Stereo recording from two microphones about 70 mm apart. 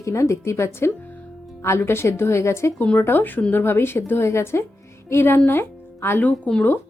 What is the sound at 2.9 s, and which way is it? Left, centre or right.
Speech, left.